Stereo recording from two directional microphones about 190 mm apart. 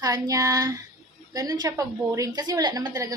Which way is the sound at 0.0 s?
20° right (ahead or behind).